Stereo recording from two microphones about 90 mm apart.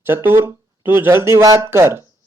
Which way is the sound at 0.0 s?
25° right (ahead or behind).